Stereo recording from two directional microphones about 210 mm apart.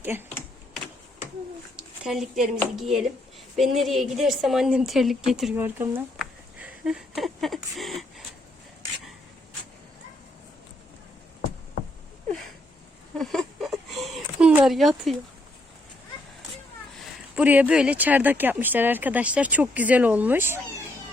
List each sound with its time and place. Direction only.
0.0 s speech: 10° right (ahead or behind)
2.0 s a woman's voice: centre (ahead or behind)
13.1 s a sound: centre (ahead or behind)
17.3 s speech: 5° right (ahead or behind)